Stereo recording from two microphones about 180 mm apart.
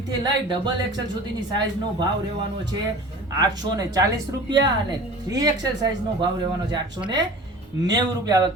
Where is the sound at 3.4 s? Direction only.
20° right (ahead or behind).